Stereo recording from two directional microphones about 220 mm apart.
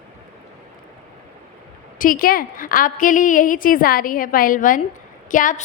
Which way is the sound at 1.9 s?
40° left (ahead or behind).